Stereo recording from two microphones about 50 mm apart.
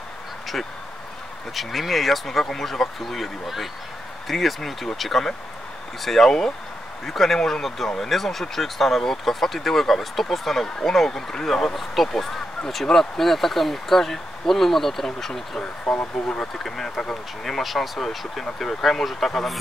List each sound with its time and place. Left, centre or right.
1.5 s speech: centre
7.3 s speech: centre
8.0 s speech: centre